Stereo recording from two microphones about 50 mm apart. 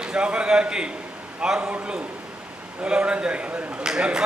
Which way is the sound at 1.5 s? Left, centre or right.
Right.